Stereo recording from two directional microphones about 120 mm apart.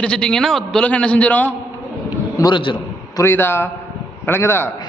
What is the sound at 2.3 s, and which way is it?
Speech, 35° left (ahead or behind).